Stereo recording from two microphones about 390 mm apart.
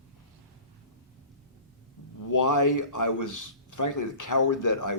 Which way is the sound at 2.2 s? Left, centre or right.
Left.